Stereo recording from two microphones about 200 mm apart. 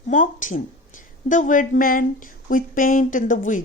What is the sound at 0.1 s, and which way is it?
Speech, 40° left (ahead or behind).